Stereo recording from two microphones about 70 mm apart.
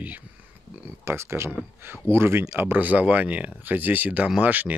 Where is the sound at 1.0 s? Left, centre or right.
Right.